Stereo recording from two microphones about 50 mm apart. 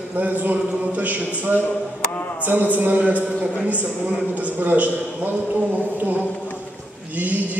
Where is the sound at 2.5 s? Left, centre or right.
Right.